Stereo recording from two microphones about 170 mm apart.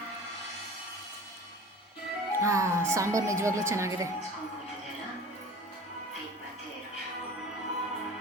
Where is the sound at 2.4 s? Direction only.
15° right (ahead or behind).